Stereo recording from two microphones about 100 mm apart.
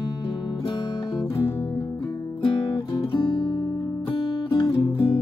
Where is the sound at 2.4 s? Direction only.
50° left (ahead or behind).